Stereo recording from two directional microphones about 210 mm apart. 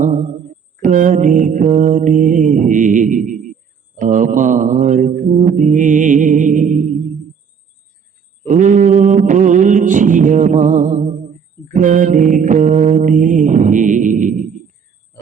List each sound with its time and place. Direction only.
0.0 s mantra: 35° right (ahead or behind)
8.4 s mantra: 35° right (ahead or behind)